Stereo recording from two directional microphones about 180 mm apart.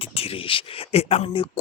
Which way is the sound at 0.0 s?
30° left (ahead or behind).